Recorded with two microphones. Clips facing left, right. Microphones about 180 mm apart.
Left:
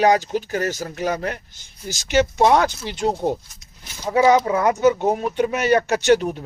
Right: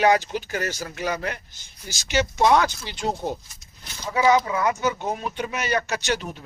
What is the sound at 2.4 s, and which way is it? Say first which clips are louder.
Speech: left 3 dB; 40° left (ahead or behind).